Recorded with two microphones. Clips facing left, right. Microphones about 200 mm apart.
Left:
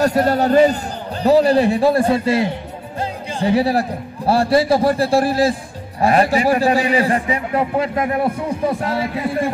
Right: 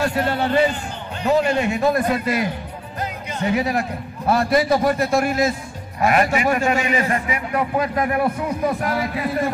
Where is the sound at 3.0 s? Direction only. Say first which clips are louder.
Left 4 dB; 30° left (ahead or behind).